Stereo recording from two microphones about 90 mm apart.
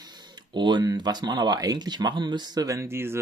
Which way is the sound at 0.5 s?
60° right (ahead or behind).